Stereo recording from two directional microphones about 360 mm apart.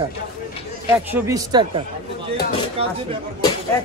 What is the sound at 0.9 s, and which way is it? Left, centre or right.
Speech, centre.